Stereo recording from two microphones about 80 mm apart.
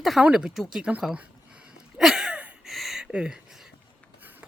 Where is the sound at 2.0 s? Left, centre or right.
Centre.